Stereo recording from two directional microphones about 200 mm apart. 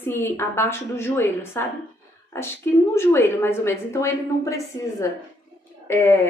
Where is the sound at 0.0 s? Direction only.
10° left (ahead or behind).